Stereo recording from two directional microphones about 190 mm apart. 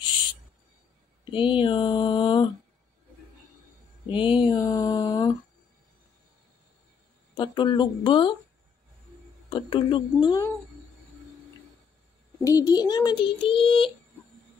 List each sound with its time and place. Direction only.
1.3 s speech: 25° left (ahead or behind)
4.1 s mantra: 25° left (ahead or behind)
7.3 s child singing: 25° left (ahead or behind)
9.5 s child singing: 25° left (ahead or behind)
12.4 s child singing: 15° left (ahead or behind)